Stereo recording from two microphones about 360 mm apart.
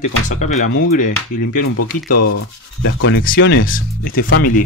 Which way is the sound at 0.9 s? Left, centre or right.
Left.